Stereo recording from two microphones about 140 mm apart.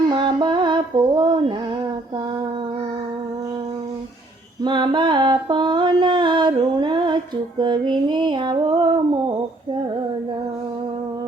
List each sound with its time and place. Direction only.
0.1 s music: 35° right (ahead or behind)
4.6 s mantra: 35° right (ahead or behind)
7.6 s female singing: 35° right (ahead or behind)